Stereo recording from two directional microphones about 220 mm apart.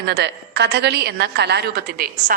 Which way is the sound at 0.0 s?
50° right (ahead or behind).